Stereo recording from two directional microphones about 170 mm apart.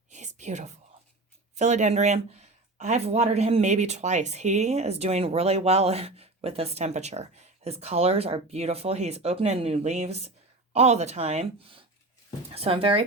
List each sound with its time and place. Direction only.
0.1 s whispering: 45° right (ahead or behind)
1.5 s speech: 45° right (ahead or behind)